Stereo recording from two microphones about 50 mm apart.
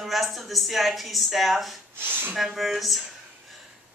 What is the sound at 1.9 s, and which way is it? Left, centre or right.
Speech, right.